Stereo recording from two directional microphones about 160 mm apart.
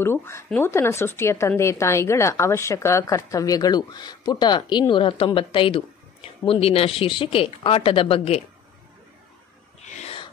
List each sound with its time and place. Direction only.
0.0 s a woman's voice: 15° left (ahead or behind); by 8.4 s 35° left (ahead or behind)
9.8 s owl: 45° left (ahead or behind)